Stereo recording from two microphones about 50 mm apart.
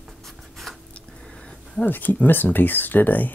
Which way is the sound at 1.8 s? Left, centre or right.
Left.